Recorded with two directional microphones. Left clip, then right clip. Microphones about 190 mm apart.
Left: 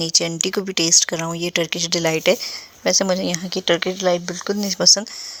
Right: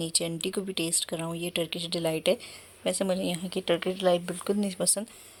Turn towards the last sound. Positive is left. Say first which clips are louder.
# left 13 dB
turn(degrees=15)  # may be behind; listen again after turning